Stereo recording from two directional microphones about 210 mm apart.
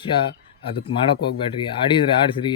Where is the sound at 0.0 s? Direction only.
25° left (ahead or behind).